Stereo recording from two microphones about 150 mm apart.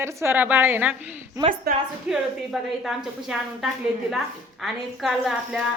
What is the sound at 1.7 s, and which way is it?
Speech, 90° right.